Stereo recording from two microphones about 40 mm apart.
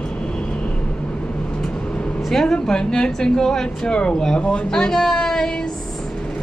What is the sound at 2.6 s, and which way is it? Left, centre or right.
Speech, centre.